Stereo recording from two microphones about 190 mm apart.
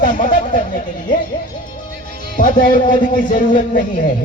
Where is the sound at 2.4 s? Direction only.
45° left (ahead or behind).